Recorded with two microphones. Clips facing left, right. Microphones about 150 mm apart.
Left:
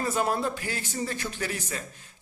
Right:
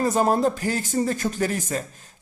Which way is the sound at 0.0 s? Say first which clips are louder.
Right 7 dB; 40° right (ahead or behind).